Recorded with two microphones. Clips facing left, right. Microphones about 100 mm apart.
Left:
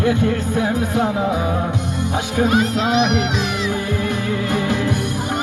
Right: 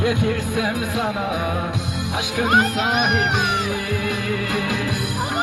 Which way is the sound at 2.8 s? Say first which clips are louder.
Left 3 dB; 50° right (ahead or behind).